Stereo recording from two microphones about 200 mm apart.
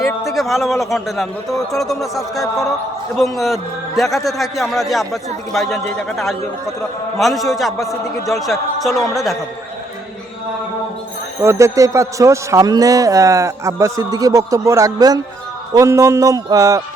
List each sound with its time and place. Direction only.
0.3 s a man's voice: centre (ahead or behind)
11.4 s a man's voice: 15° right (ahead or behind)